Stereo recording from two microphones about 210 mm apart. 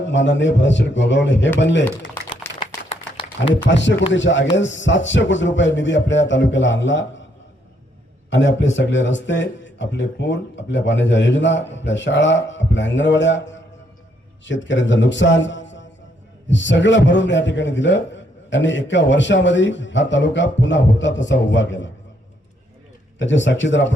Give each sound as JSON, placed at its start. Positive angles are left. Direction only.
{"t": 0.1, "sound": "a man's voice", "side_deg": 60}
{"t": 2.6, "sound": "a sound", "side_deg": 25}
{"t": 3.8, "sound": "a man's voice", "side_deg": 60}
{"t": 8.3, "sound": "a man's voice", "side_deg": 60}
{"t": 23.1, "sound": "a man's voice", "side_deg": 60}